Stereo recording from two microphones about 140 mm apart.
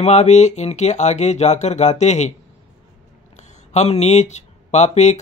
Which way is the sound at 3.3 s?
55° left (ahead or behind).